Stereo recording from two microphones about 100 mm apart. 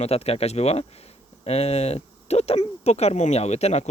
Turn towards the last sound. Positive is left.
turn(degrees=90)